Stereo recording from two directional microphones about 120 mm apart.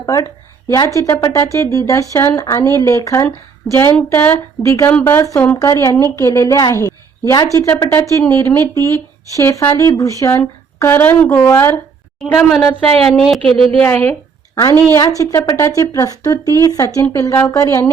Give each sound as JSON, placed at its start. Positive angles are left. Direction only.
{"t": 0.0, "sound": "a woman's voice", "side_deg": 30}
{"t": 3.9, "sound": "a woman's voice", "side_deg": 10}
{"t": 4.6, "sound": "a woman's voice", "side_deg": 25}
{"t": 4.9, "sound": "a woman's voice", "side_deg": 15}
{"t": 5.5, "sound": "a woman's voice", "side_deg": 25}
{"t": 12.2, "sound": "speech", "side_deg": 0}
{"t": 13.4, "sound": "speech", "side_deg": -55}
{"t": 13.8, "sound": "a sound", "side_deg": 20}
{"t": 15.2, "sound": "a woman's voice", "side_deg": 20}